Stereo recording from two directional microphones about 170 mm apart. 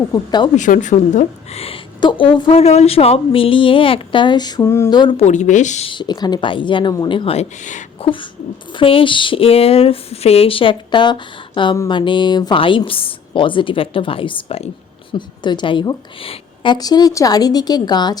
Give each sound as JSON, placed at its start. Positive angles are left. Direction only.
{"t": 0.1, "sound": "a woman's voice", "side_deg": 25}
{"t": 0.5, "sound": "a woman's voice", "side_deg": 45}
{"t": 4.9, "sound": "a woman's voice", "side_deg": 30}
{"t": 5.2, "sound": "speech", "side_deg": 45}
{"t": 5.9, "sound": "a woman's voice", "side_deg": 25}
{"t": 8.7, "sound": "a woman's voice", "side_deg": 30}